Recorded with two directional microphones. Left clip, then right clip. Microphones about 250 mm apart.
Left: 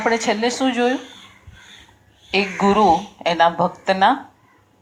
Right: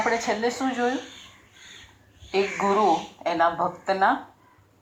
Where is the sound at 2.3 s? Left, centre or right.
Left.